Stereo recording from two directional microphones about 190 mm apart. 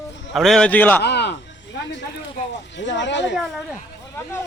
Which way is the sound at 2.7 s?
70° left (ahead or behind).